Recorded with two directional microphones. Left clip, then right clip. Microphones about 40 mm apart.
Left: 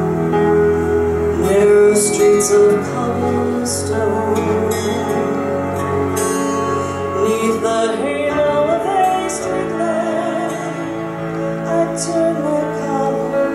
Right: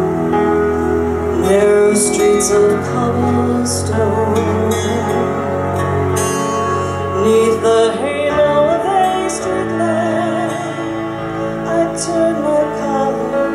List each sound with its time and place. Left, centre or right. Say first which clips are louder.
0.3 s music: left 2 dB; right
4.0 s music: right 3 dB; right
7.2 s music: right 5 dB; right
11.7 s music: right 1 dB; right